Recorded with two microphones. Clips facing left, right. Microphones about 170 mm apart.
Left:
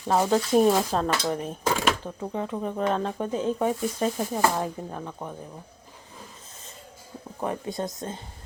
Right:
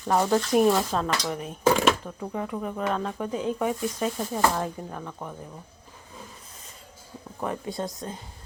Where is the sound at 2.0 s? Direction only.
20° left (ahead or behind).